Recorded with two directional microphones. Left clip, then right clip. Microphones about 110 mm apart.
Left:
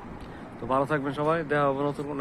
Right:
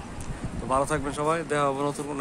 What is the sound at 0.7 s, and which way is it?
Speech, 5° right (ahead or behind).